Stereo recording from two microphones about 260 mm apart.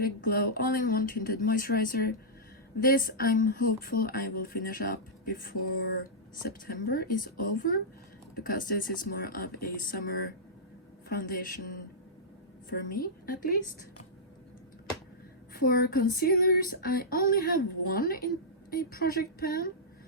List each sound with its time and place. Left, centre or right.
0.0 s speech: left
15.5 s speech: left